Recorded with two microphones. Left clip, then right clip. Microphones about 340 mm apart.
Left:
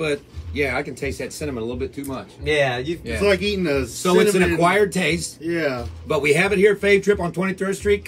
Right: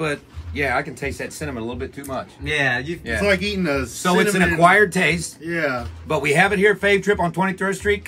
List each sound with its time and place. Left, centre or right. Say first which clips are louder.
0.0 s speech: left 1 dB; centre
2.4 s a man's voice: left 1 dB; centre
4.6 s speech: right 4 dB; centre
5.5 s a man's voice: right 1 dB; centre